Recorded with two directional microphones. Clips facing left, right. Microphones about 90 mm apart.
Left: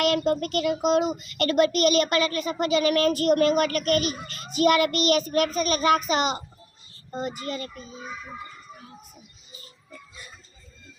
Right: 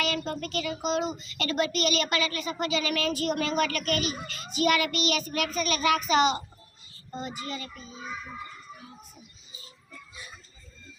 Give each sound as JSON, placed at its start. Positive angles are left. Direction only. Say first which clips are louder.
{"t": 0.0, "sound": "a child's voice", "louder": "left 8 dB", "side_deg": 55}